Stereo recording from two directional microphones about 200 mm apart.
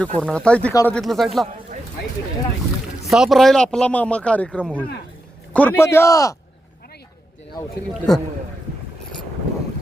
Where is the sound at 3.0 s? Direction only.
Centre (ahead or behind); by 6.3 s 15° left (ahead or behind).